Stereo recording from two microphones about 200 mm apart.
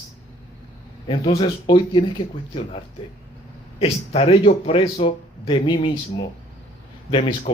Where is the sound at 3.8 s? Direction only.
30° left (ahead or behind).